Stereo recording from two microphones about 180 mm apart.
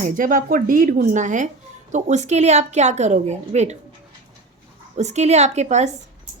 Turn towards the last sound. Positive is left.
turn(degrees=-40)  # may be behind; listen again after turning